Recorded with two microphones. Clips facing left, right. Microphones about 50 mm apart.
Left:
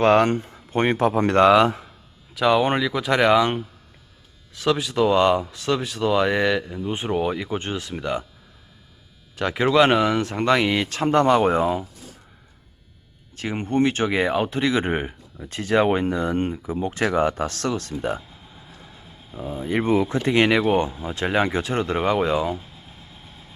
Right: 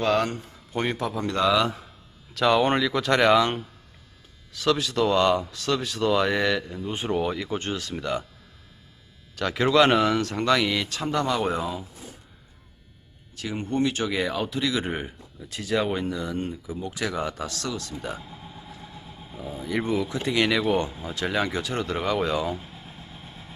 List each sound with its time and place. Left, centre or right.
0.0 s speech: left
2.3 s speech: centre
9.3 s speech: left
13.3 s speech: left
19.4 s speech: left